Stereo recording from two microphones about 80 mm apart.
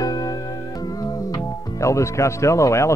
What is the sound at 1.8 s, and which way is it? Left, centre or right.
Speech, left.